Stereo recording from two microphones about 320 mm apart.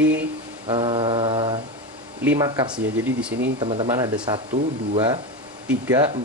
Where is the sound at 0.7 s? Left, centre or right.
Centre.